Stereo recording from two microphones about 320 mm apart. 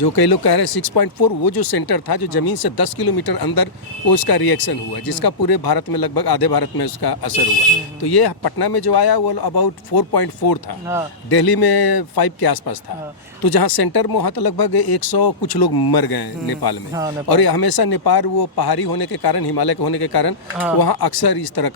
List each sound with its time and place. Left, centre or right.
0.0 s speech: left